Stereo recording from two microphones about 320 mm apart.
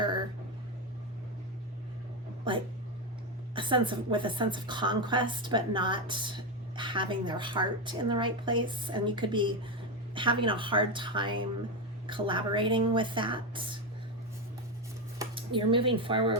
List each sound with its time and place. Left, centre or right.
3.5 s a woman's voice: centre
15.2 s speech: centre